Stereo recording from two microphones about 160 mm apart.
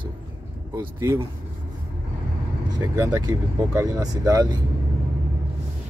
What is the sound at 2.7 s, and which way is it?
Speech, 20° right (ahead or behind).